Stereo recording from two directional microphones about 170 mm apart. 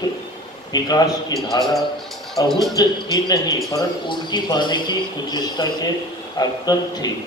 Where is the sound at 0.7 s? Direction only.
20° left (ahead or behind).